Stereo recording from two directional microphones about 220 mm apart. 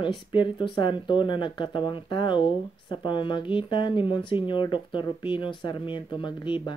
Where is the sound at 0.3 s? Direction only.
20° left (ahead or behind).